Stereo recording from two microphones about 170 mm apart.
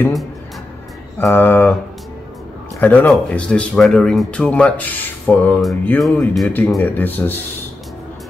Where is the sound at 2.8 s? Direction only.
10° left (ahead or behind).